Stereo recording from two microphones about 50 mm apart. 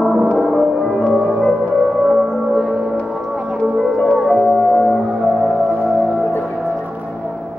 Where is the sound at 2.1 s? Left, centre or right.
Centre.